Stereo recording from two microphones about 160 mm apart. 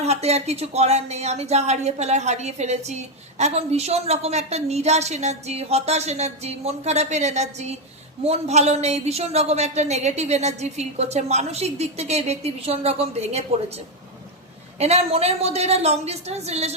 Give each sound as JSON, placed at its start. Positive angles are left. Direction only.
{"t": 0.0, "sound": "speech", "side_deg": -40}